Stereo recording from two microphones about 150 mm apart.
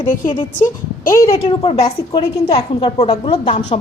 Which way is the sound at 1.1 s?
20° left (ahead or behind).